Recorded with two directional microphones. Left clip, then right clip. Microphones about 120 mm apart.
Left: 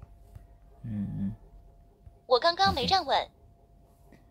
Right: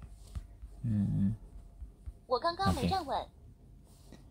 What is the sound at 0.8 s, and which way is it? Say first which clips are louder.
Speech: right 2 dB; 15° right (ahead or behind).